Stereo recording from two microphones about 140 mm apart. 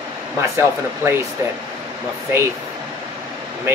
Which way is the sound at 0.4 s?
20° right (ahead or behind).